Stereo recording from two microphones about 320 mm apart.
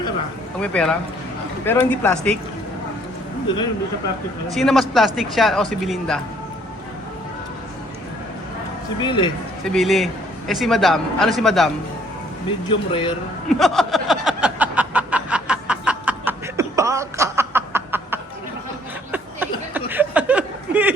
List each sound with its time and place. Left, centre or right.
0.6 s a man's voice: centre
4.5 s a man's voice: centre
9.0 s speech: centre
9.6 s a man's voice: centre
12.9 s speech: centre
13.5 s a sound: centre
19.9 s chuckle: centre